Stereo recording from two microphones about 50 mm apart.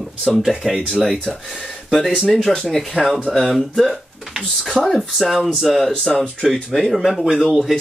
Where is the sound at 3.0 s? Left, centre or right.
Right.